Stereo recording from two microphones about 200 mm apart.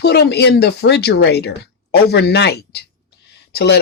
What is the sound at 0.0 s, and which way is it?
Speech, 55° left (ahead or behind).